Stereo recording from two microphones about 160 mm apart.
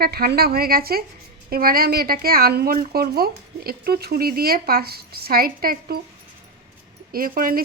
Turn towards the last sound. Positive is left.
turn(degrees=-65)  # may be behind; listen again after turning